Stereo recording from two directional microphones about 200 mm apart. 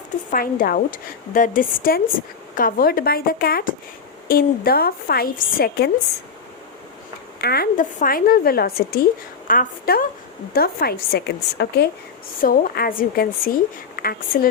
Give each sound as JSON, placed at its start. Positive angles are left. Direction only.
{"t": 0.3, "sound": "a woman's voice", "side_deg": 45}
{"t": 7.4, "sound": "a woman's voice", "side_deg": 50}